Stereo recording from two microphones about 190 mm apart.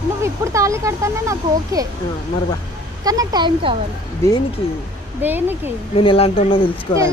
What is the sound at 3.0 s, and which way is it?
Speech, 20° right (ahead or behind).